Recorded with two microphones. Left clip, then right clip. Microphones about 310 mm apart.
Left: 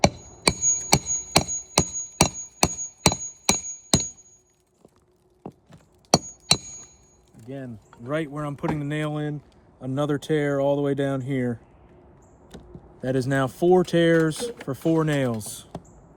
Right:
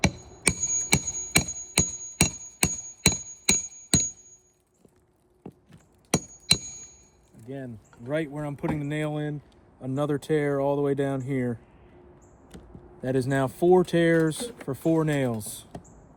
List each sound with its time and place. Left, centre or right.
0.0 s music: left
5.4 s a sound: left
7.5 s speech: left
8.6 s speech: left
9.0 s speech: left
13.1 s speech: left
15.4 s speech: left